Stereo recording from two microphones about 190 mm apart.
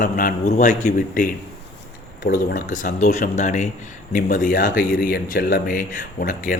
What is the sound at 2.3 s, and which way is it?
Speech, 45° left (ahead or behind).